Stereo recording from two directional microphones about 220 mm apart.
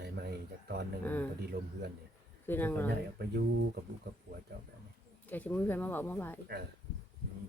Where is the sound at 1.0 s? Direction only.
10° left (ahead or behind).